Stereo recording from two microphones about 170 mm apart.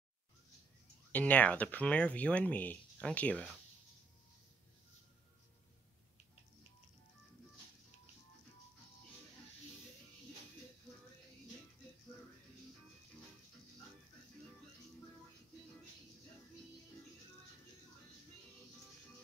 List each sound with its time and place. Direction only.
1.1 s speech: 10° left (ahead or behind)